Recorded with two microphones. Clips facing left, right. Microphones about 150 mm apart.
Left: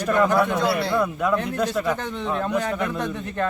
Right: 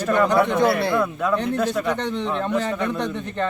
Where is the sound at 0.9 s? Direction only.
15° left (ahead or behind).